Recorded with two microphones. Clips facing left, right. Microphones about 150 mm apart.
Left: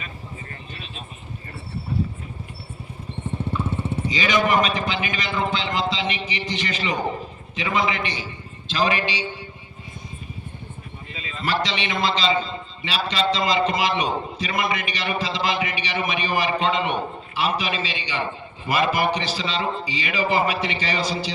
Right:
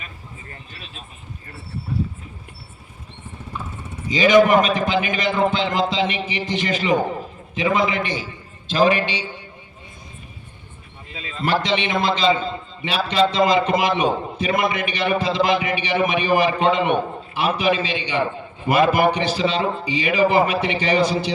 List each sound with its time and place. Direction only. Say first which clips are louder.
3.6 s vehicle: left 8 dB; 30° left (ahead or behind)
4.1 s a man's voice: right 8 dB; 50° right (ahead or behind)
11.2 s a man's voice: right 3 dB; 55° right (ahead or behind)